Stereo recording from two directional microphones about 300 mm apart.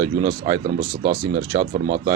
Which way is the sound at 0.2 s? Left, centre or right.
Right.